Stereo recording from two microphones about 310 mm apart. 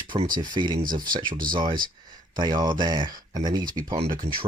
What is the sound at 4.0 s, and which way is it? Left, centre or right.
Speech, right.